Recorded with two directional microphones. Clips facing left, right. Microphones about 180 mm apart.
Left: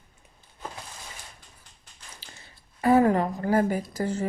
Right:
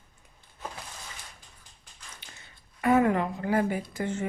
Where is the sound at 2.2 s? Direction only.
30° left (ahead or behind).